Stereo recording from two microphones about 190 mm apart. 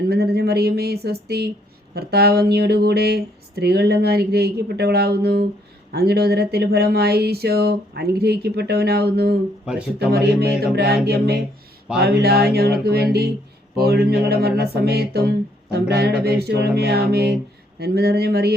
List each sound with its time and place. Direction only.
0.1 s speech: 55° right (ahead or behind)
9.6 s speech: 5° right (ahead or behind)
10.1 s speech: 55° right (ahead or behind)